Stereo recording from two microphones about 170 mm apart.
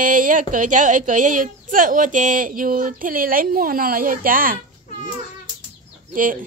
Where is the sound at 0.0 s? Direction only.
50° right (ahead or behind).